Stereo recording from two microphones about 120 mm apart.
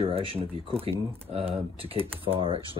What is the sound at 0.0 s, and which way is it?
Speech, 50° right (ahead or behind).